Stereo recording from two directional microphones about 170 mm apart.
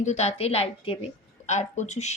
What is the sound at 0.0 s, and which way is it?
A woman's voice, 40° left (ahead or behind).